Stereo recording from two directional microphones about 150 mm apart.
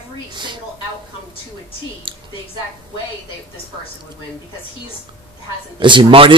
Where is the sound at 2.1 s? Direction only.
35° right (ahead or behind).